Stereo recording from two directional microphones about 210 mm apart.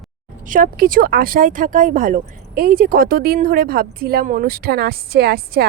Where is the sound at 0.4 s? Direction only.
40° right (ahead or behind).